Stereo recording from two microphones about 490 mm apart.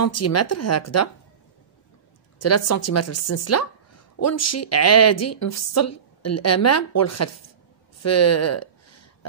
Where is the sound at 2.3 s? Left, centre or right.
Left.